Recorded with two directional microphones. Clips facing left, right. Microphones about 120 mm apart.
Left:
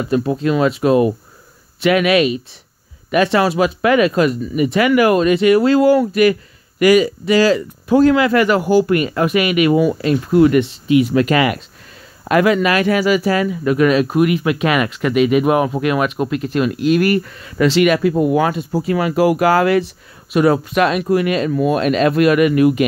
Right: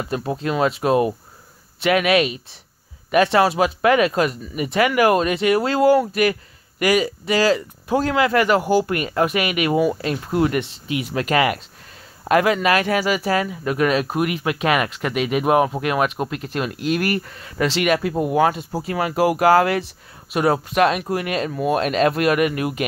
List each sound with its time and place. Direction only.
0.1 s speech: 30° right (ahead or behind)